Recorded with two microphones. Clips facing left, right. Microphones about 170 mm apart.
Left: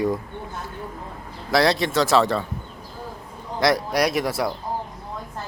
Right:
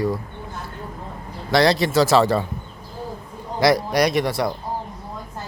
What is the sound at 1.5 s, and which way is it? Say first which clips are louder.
Speech: right 2 dB; centre (ahead or behind).